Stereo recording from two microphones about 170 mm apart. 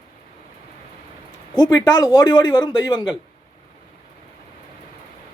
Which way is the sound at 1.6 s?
20° left (ahead or behind).